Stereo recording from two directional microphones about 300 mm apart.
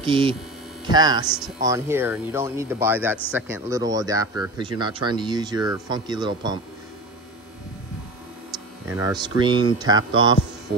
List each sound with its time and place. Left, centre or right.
0.0 s speech: centre
1.2 s speech: centre
8.8 s speech: centre